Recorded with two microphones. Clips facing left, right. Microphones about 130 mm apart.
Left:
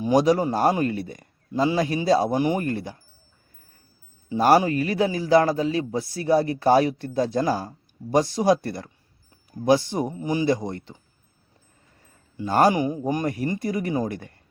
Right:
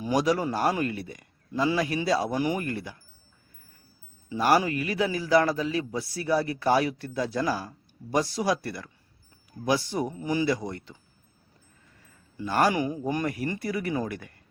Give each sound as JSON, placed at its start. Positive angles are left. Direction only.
{"t": 0.0, "sound": "a man's voice", "side_deg": 25}
{"t": 4.3, "sound": "a man's voice", "side_deg": 30}
{"t": 12.5, "sound": "a man's voice", "side_deg": 30}